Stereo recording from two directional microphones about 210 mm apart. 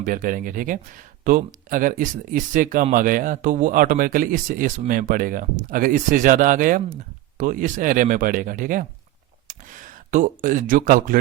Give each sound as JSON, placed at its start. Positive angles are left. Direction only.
{"t": 0.0, "sound": "speech", "side_deg": -40}